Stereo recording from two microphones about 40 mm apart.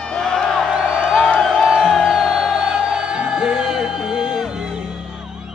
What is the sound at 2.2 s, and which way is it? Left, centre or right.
Music, centre.